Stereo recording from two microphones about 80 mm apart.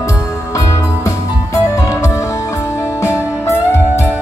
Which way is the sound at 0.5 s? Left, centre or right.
Left.